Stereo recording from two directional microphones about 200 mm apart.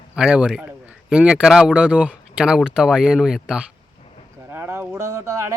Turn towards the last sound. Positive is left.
turn(degrees=-15)  # may be behind; listen again after turning